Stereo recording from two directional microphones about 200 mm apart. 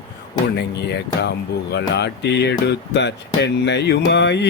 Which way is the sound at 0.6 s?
60° left (ahead or behind).